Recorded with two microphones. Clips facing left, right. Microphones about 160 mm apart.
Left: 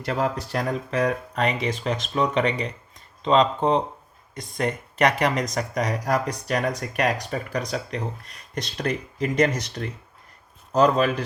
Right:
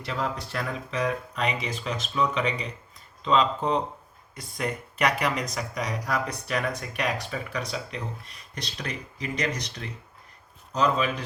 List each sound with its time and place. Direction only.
0.0 s speech: 50° left (ahead or behind)
4.5 s speech: 40° left (ahead or behind)